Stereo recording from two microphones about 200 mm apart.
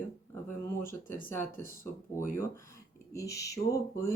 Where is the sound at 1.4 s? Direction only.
10° left (ahead or behind).